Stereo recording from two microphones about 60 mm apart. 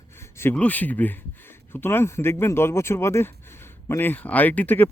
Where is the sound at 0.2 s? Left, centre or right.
Left.